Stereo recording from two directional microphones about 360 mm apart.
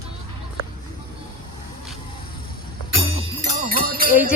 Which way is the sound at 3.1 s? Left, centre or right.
Right.